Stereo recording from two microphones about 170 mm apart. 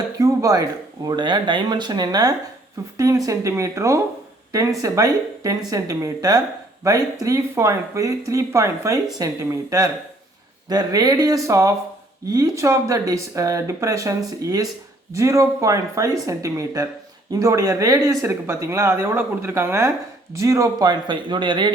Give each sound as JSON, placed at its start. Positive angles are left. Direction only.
{"t": 0.2, "sound": "speech", "side_deg": -20}